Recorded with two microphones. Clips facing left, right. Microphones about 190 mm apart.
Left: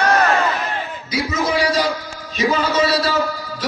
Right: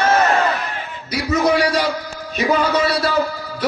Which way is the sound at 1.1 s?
65° right (ahead or behind).